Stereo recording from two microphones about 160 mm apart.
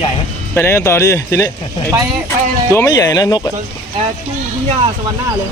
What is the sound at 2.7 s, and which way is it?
Speech, 25° left (ahead or behind).